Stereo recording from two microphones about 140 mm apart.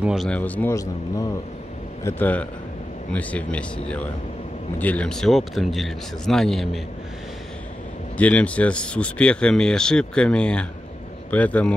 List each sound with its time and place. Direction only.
0.0 s a man's voice: 5° right (ahead or behind)
0.3 s speech: 10° left (ahead or behind)
0.7 s a man's voice: 25° left (ahead or behind)
2.0 s speech: 10° left (ahead or behind)
8.2 s speech: 10° left (ahead or behind)